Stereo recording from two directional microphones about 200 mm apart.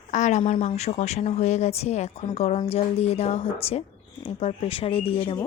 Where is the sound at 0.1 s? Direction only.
35° left (ahead or behind).